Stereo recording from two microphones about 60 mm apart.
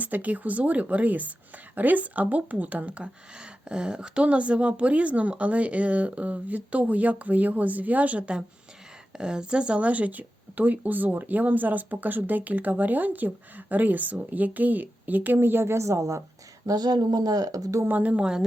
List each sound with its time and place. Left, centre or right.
0.0 s speech: right
16.6 s speech: right
17.8 s speech: right